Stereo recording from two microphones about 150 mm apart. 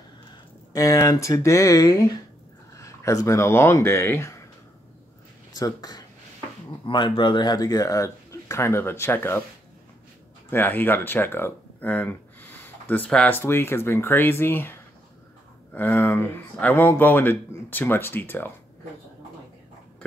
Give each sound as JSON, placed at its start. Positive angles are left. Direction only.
{"t": 0.3, "sound": "speech", "side_deg": 25}
{"t": 5.5, "sound": "speech", "side_deg": 25}
{"t": 10.5, "sound": "speech", "side_deg": 15}